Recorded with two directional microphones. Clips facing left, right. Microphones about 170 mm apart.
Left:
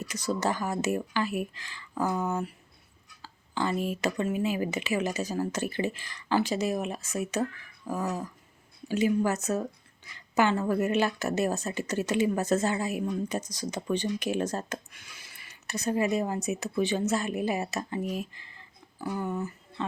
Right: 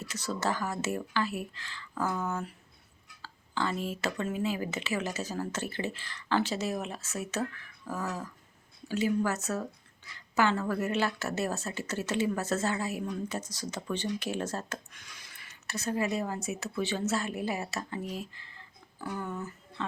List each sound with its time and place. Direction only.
0.0 s a woman's voice: 15° left (ahead or behind)